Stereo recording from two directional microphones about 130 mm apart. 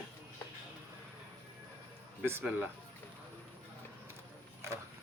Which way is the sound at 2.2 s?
15° right (ahead or behind).